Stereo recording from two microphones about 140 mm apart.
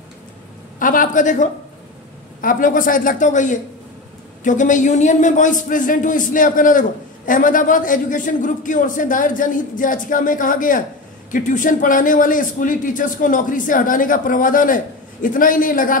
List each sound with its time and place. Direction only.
0.7 s a woman's voice: 75° left (ahead or behind)
2.4 s a man's voice: 75° left (ahead or behind)